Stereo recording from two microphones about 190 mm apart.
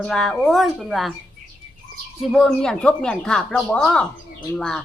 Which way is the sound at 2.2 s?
Centre (ahead or behind).